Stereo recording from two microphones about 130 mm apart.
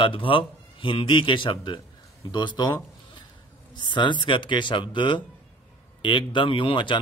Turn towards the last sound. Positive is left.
turn(degrees=40)  # may be behind; listen again after turning